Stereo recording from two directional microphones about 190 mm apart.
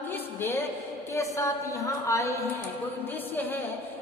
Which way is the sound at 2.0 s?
15° left (ahead or behind).